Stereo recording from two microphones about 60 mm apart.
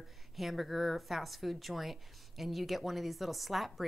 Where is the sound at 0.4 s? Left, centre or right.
Centre.